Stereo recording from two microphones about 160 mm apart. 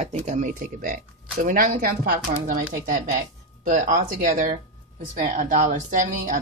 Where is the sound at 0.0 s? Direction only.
45° right (ahead or behind); by 2.5 s 65° right (ahead or behind).